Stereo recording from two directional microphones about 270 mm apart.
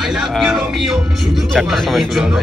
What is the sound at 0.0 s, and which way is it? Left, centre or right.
Speech, centre.